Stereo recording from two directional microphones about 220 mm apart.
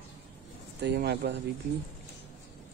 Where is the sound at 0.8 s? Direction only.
50° right (ahead or behind).